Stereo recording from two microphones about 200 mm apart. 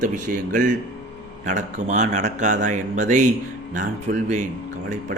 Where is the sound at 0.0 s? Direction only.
40° right (ahead or behind).